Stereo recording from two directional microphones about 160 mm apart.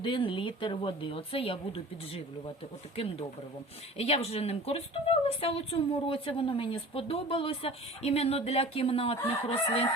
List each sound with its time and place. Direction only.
0.0 s a woman's voice: 30° left (ahead or behind)